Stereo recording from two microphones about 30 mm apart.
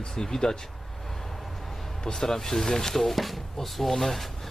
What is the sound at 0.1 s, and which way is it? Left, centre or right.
Speech, centre.